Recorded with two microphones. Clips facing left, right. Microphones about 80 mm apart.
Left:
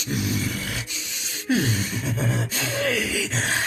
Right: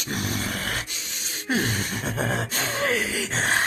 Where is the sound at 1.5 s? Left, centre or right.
Right.